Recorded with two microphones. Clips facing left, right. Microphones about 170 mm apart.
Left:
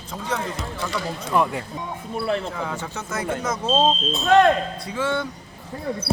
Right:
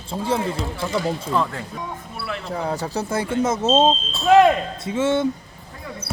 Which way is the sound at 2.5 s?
35° right (ahead or behind).